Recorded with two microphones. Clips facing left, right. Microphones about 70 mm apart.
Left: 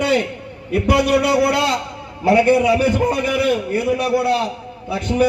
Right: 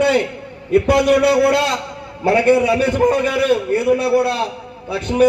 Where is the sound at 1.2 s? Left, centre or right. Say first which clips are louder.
Right 2 dB; right.